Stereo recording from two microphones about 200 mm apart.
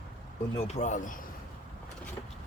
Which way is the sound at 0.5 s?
35° left (ahead or behind).